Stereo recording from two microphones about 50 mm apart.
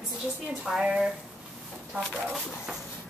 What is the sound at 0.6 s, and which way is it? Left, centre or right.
Speech, centre.